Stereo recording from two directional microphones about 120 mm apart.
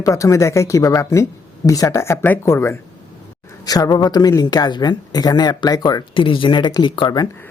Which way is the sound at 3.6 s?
30° left (ahead or behind).